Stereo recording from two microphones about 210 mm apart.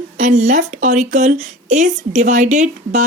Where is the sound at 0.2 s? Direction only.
35° right (ahead or behind).